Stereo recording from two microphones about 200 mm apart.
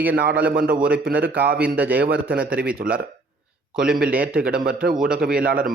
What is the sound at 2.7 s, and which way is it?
Speech, 45° right (ahead or behind).